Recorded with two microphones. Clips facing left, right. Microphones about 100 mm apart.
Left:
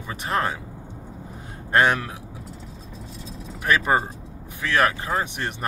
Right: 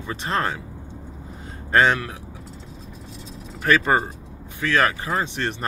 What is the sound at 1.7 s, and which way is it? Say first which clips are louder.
Speech: right 1 dB; 15° left (ahead or behind).